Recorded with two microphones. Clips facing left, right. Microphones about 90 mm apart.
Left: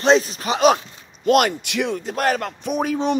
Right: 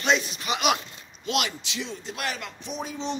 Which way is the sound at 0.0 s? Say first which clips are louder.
Left 8 dB; 35° left (ahead or behind).